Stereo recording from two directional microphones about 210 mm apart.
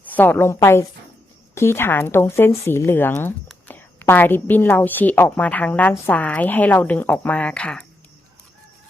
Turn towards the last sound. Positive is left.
turn(degrees=5)  # may be behind; listen again after turning